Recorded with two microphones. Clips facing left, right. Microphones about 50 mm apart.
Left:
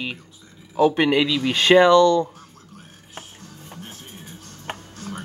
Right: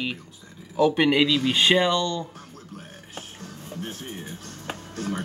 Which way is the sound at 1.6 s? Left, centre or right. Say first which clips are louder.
Left 11 dB; left.